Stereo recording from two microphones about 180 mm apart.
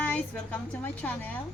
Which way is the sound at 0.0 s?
10° left (ahead or behind).